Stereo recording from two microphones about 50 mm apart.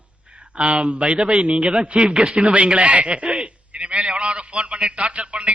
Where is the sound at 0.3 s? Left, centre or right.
Right.